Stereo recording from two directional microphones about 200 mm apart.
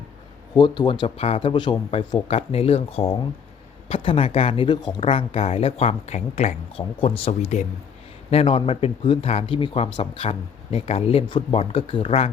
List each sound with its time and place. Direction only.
0.5 s speech: 20° left (ahead or behind)